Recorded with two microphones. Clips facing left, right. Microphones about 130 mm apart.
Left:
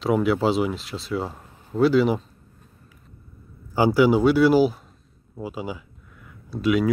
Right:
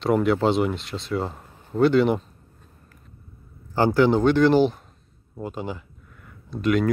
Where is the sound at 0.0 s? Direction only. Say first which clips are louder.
Right 1 dB; centre (ahead or behind).